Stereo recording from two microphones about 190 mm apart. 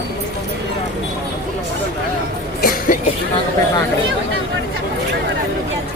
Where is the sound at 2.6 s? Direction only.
50° left (ahead or behind).